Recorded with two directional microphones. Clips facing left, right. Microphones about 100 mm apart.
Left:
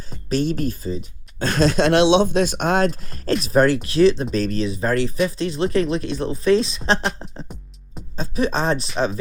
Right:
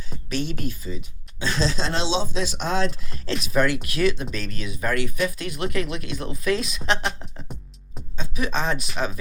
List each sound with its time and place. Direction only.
0.3 s speech: 40° left (ahead or behind)
1.4 s speech: 55° left (ahead or behind); by 7.1 s 35° left (ahead or behind)
8.1 s speech: 35° left (ahead or behind)